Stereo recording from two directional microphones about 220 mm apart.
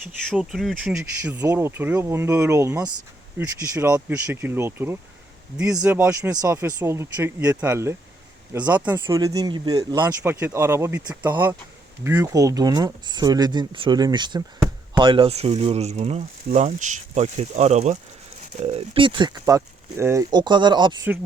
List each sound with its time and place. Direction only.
0.3 s speech: centre (ahead or behind)
1.4 s speech: 15° right (ahead or behind)